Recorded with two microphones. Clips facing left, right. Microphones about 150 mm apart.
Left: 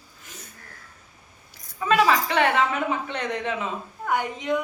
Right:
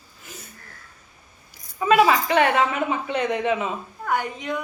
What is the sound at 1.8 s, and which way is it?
Speech, 10° right (ahead or behind).